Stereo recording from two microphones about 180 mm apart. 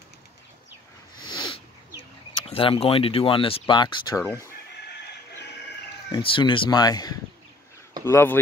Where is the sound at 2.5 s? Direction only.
30° left (ahead or behind).